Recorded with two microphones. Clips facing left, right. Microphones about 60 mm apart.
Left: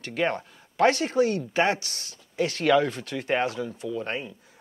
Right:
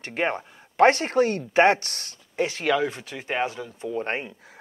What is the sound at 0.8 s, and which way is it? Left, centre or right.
Speech, right.